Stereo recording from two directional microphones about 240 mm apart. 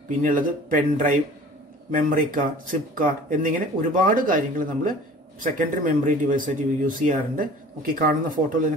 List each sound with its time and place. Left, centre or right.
0.2 s speech: right